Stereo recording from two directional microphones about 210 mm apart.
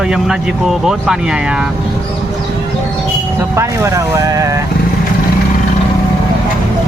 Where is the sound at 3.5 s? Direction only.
15° right (ahead or behind).